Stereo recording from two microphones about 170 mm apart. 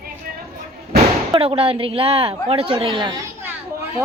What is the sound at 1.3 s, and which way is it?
A woman's voice, 35° right (ahead or behind).